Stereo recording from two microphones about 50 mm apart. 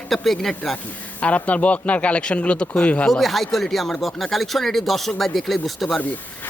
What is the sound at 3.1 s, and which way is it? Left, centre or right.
Speech, centre.